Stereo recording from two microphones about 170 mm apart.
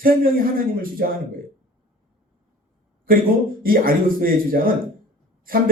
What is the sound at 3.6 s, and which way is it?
Speech, 60° right (ahead or behind).